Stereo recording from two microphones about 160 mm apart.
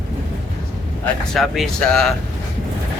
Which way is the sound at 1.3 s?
Centre (ahead or behind).